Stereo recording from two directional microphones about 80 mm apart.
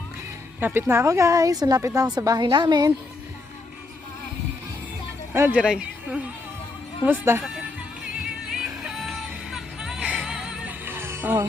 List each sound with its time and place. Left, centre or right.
0.6 s speech: right
1.8 s speech: right
2.0 s a woman's voice: right
2.4 s a woman's voice: right
5.5 s speech: centre
7.3 s speech: right
8.4 s music: centre
10.7 s music: right